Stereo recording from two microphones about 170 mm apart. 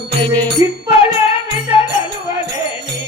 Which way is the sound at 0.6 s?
20° right (ahead or behind).